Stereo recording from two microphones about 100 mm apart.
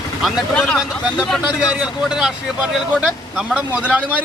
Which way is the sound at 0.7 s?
10° right (ahead or behind).